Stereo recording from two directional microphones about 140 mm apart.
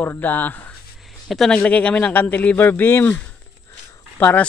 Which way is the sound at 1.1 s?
Centre (ahead or behind).